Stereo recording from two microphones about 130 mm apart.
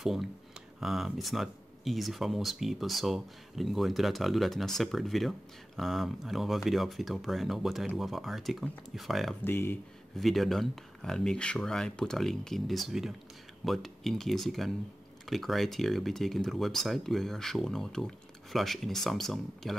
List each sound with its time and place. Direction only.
0.0 s speech: centre (ahead or behind)
9.4 s speech: 15° left (ahead or behind)
10.1 s speech: centre (ahead or behind)